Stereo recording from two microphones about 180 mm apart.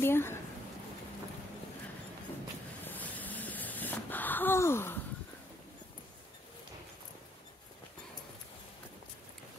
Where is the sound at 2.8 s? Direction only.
10° left (ahead or behind).